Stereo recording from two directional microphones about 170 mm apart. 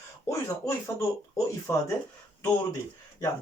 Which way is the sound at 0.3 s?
20° left (ahead or behind).